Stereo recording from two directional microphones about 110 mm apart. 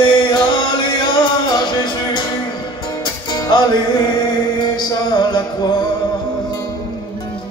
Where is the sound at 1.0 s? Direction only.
40° left (ahead or behind).